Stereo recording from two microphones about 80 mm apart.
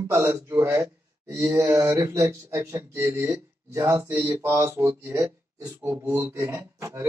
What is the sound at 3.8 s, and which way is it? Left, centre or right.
A man's voice, right.